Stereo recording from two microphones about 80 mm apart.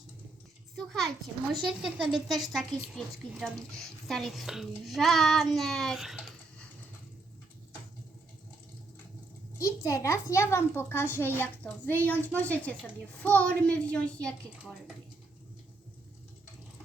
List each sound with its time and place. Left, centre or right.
0.8 s a sound: centre
1.6 s a woman's voice: centre
9.6 s a child's voice: left; by 14.5 s centre